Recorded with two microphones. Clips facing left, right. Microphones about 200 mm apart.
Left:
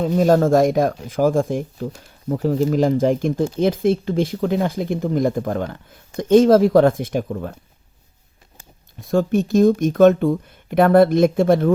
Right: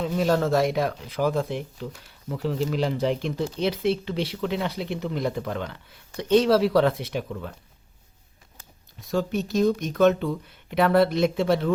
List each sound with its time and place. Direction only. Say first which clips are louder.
0.0 s speech: left 7 dB; 45° left (ahead or behind)
9.0 s speech: left 8 dB; 50° left (ahead or behind)